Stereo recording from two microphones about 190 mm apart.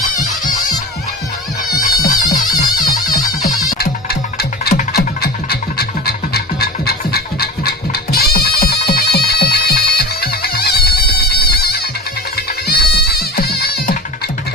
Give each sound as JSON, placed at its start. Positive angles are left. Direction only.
{"t": 2.0, "sound": "music", "side_deg": 20}
{"t": 3.8, "sound": "music", "side_deg": 55}
{"t": 12.6, "sound": "music", "side_deg": 55}